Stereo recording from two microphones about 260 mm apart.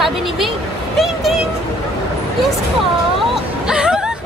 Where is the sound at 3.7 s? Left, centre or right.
Centre.